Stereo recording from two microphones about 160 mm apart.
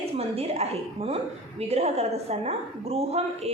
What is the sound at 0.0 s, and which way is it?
A woman's voice, 40° right (ahead or behind).